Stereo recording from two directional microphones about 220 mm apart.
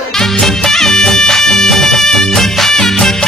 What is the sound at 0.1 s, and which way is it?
Music, centre (ahead or behind).